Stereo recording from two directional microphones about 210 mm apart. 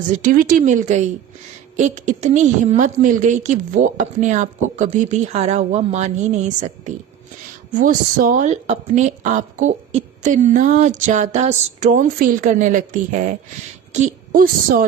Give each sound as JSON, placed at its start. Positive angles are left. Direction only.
{"t": 0.1, "sound": "a woman's voice", "side_deg": -40}